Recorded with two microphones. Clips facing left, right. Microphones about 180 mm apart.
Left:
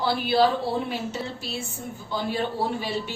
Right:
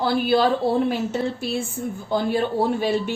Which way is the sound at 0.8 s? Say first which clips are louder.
Right 7 dB; 55° right (ahead or behind).